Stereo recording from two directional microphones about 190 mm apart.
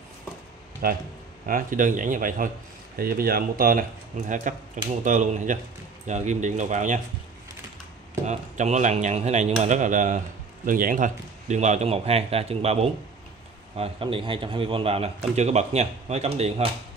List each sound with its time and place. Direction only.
0.8 s a man's voice: 50° right (ahead or behind)
8.3 s a man's voice: 40° right (ahead or behind)